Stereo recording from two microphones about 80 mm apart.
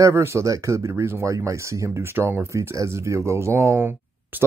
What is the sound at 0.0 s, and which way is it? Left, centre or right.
Speech, right.